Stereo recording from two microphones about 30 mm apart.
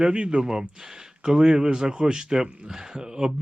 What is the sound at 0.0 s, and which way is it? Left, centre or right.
Speech, right.